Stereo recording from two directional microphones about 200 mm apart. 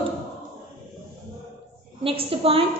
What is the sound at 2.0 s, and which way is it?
Speech, 30° right (ahead or behind).